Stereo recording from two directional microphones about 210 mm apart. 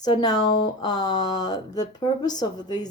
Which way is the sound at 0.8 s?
20° left (ahead or behind).